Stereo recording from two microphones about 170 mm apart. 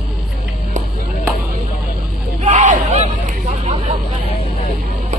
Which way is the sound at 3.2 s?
40° right (ahead or behind).